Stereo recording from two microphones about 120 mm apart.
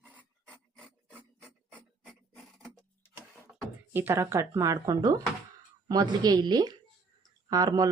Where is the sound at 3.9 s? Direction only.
20° right (ahead or behind).